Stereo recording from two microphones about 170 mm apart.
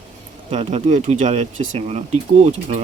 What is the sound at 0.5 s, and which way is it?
Speech, 40° right (ahead or behind).